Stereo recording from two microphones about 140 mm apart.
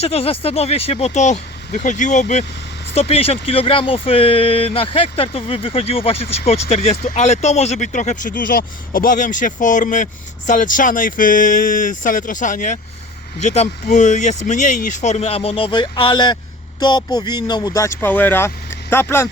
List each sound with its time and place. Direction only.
0.0 s speech: 45° left (ahead or behind)
2.9 s speech: 45° left (ahead or behind); by 12.8 s 65° left (ahead or behind)
13.4 s speech: 55° left (ahead or behind); by 17.9 s 25° left (ahead or behind)
18.0 s speech: 15° left (ahead or behind)